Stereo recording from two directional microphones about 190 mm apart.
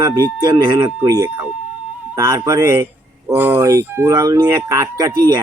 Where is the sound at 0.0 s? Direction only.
20° right (ahead or behind).